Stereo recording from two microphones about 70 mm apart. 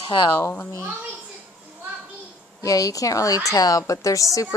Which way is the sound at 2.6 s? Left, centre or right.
Left.